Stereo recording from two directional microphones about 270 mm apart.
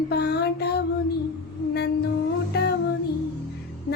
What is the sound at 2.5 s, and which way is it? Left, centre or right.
Child singing, left.